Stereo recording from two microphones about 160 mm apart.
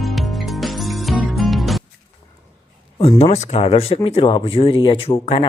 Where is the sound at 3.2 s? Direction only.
45° left (ahead or behind).